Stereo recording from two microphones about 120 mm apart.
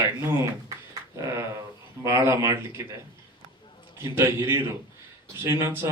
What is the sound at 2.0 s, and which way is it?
Speech, 20° right (ahead or behind).